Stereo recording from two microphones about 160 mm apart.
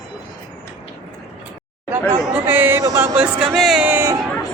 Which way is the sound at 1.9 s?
15° right (ahead or behind).